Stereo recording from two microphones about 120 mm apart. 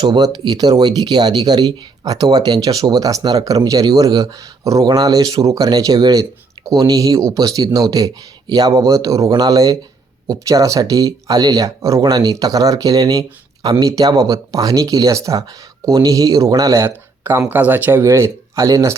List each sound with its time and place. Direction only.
0.0 s speech: 35° right (ahead or behind)